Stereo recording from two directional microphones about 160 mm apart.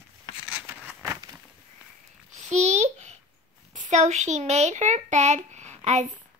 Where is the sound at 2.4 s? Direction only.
50° right (ahead or behind).